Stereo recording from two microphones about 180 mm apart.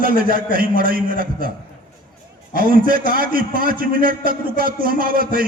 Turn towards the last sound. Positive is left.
turn(degrees=-55)  # may be behind; listen again after turning